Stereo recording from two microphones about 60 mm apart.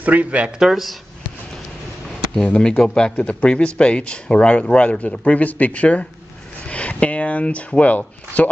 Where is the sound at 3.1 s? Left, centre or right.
Left.